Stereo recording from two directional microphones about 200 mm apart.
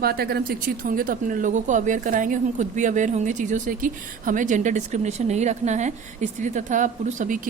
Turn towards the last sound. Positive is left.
turn(degrees=-40)  # may be behind; listen again after turning